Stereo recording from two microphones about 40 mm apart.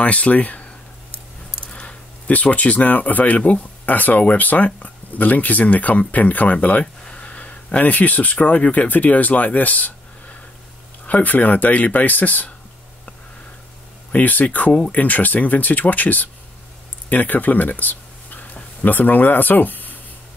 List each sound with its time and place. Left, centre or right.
0.0 s speech: left
1.7 s a sound: left
2.2 s speech: left
6.8 s speech: left
14.1 s speech: left